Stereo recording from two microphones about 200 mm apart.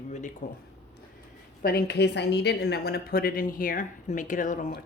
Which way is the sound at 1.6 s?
50° left (ahead or behind).